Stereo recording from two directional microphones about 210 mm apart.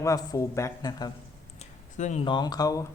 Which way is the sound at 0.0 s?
15° left (ahead or behind).